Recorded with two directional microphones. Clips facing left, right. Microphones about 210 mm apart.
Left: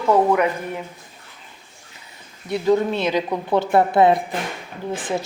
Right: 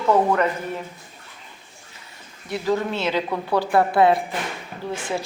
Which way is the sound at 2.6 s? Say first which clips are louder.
Left 4 dB; 15° left (ahead or behind).